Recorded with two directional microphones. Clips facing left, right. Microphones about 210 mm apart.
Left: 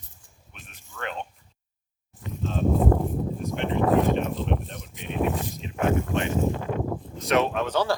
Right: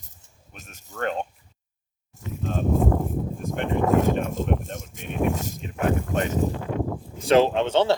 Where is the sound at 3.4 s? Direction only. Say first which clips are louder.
Right 1 dB; 50° right (ahead or behind).